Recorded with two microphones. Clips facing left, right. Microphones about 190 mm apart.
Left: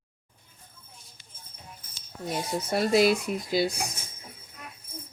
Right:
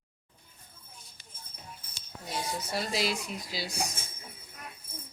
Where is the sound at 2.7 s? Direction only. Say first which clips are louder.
Left 11 dB; 55° left (ahead or behind).